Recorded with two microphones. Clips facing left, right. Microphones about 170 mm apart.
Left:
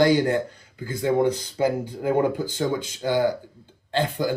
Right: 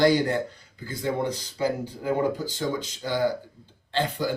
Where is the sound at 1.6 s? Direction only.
55° left (ahead or behind).